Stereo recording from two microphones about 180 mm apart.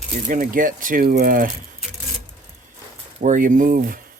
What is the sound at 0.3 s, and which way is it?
Speech, 50° right (ahead or behind).